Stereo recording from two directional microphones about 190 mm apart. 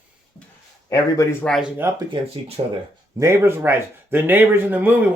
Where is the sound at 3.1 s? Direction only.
15° right (ahead or behind).